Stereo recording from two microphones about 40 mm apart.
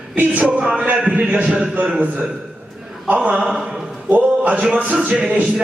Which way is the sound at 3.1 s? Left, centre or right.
Right.